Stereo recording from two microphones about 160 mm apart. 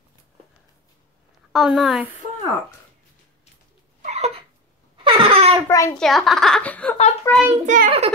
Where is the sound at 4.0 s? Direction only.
45° right (ahead or behind).